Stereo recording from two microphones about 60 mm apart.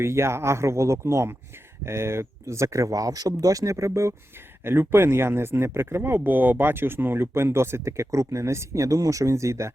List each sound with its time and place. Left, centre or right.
0.0 s speech: right
4.6 s speech: right